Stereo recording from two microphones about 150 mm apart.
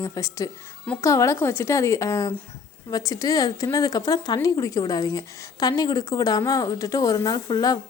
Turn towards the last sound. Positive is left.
turn(degrees=25)  # may be behind; listen again after turning